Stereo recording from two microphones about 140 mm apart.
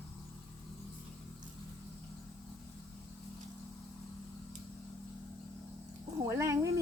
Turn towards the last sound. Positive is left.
turn(degrees=-20)  # may be behind; listen again after turning